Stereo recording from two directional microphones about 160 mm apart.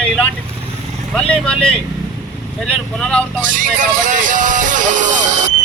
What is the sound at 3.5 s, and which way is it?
Speech, 55° right (ahead or behind).